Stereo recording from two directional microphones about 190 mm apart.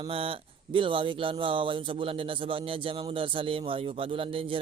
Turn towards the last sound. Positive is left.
turn(degrees=-30)  # may be behind; listen again after turning